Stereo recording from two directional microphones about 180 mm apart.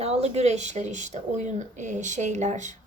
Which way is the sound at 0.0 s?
35° right (ahead or behind).